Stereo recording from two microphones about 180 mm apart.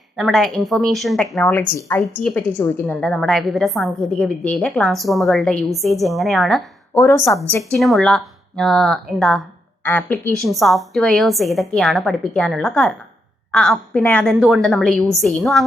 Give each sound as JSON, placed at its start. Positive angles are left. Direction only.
{"t": 0.2, "sound": "a woman's voice", "side_deg": 0}
{"t": 6.9, "sound": "a woman's voice", "side_deg": 15}
{"t": 7.6, "sound": "a woman's voice", "side_deg": 0}